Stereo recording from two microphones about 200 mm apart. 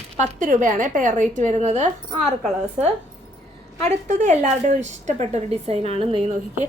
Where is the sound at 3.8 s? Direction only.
40° right (ahead or behind).